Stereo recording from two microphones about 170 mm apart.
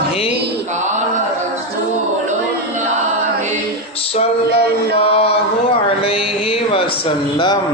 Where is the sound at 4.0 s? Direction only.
35° left (ahead or behind).